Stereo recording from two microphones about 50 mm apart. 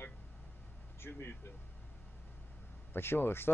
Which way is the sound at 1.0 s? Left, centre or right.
Left.